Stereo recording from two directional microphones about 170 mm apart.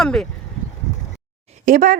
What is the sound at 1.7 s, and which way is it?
Speech, 55° right (ahead or behind).